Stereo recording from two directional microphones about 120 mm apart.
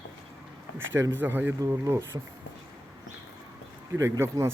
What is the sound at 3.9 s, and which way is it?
Speech, 25° right (ahead or behind).